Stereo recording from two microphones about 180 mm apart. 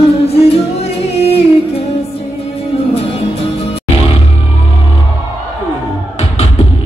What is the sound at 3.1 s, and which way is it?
Music, 35° left (ahead or behind).